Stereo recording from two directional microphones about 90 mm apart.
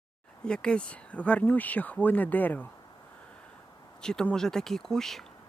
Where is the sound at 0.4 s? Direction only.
10° left (ahead or behind).